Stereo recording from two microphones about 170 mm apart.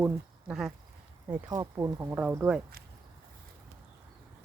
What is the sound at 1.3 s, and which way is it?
Speech, 20° right (ahead or behind).